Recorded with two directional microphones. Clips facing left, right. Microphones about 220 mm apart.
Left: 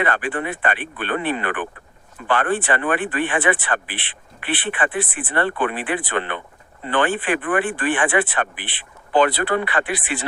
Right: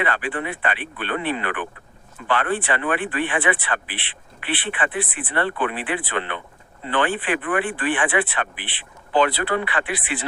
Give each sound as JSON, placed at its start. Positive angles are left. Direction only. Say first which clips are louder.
{"t": 0.0, "sound": "speech", "louder": "left 2 dB", "side_deg": 45}